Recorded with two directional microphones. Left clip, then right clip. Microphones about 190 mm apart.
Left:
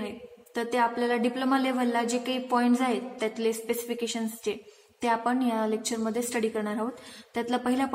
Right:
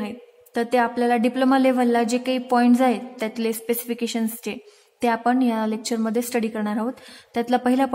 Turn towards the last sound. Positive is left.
turn(degrees=-45)  # may be behind; listen again after turning